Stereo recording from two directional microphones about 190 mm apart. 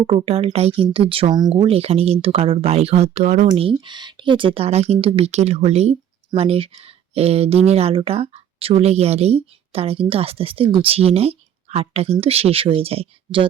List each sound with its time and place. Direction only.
0.0 s speech: 30° right (ahead or behind)
3.5 s speech: 25° right (ahead or behind)